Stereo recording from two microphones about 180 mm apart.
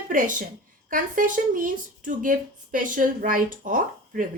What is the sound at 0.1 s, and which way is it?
A woman's voice, 45° right (ahead or behind).